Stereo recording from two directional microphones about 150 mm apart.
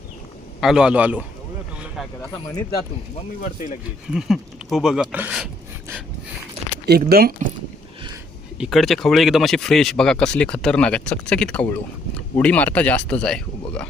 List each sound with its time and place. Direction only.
0.6 s a man's voice: 5° right (ahead or behind)
4.1 s speech: 5° right (ahead or behind)
6.8 s speech: 90° right
8.5 s speech: 5° right (ahead or behind)